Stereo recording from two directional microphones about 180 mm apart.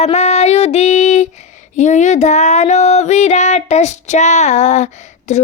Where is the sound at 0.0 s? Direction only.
35° left (ahead or behind).